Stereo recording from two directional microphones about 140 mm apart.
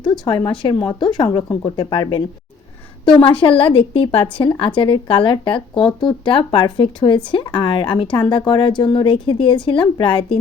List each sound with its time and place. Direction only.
0.0 s a woman's voice: 30° left (ahead or behind)